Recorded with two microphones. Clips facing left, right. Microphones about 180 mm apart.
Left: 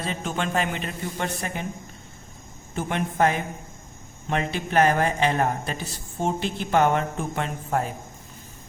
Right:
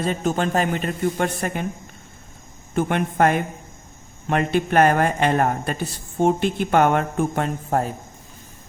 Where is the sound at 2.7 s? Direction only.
60° right (ahead or behind); by 7.9 s 40° right (ahead or behind).